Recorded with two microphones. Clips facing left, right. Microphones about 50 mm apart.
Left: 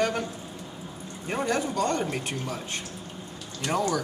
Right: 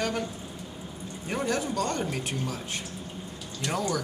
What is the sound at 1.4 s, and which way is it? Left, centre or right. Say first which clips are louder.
Speech: left 3 dB; centre.